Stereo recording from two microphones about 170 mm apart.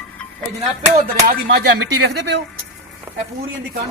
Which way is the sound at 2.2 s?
90° right.